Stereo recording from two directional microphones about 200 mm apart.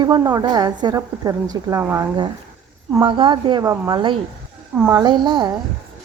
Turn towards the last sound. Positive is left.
turn(degrees=-20)  # may be behind; listen again after turning